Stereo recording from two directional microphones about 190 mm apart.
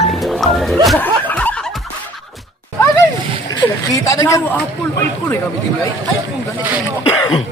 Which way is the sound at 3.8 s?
20° left (ahead or behind).